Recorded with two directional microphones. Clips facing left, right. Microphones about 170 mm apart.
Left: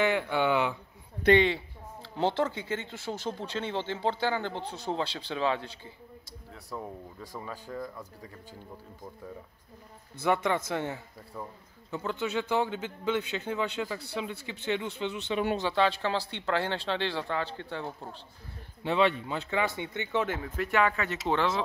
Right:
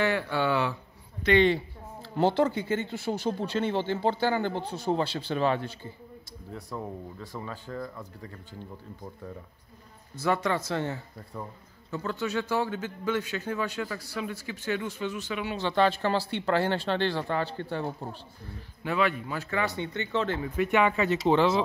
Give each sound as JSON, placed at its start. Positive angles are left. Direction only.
{"t": 0.0, "sound": "speech", "side_deg": 20}
{"t": 1.4, "sound": "a sound", "side_deg": 0}
{"t": 2.9, "sound": "speech", "side_deg": -10}
{"t": 6.7, "sound": "speech", "side_deg": 5}
{"t": 10.2, "sound": "a man's voice", "side_deg": 20}
{"t": 11.9, "sound": "a man's voice", "side_deg": 15}
{"t": 15.7, "sound": "speech", "side_deg": 0}
{"t": 18.8, "sound": "speech", "side_deg": 25}
{"t": 20.5, "sound": "speech", "side_deg": -15}